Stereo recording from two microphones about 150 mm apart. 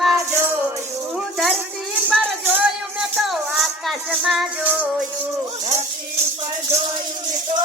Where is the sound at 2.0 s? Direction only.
10° right (ahead or behind).